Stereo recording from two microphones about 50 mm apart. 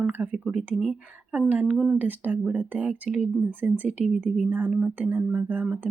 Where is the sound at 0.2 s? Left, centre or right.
Right.